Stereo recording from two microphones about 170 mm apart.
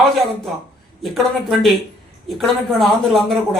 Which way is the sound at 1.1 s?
Centre (ahead or behind).